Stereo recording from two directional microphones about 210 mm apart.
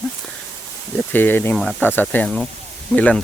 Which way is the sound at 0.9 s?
10° left (ahead or behind).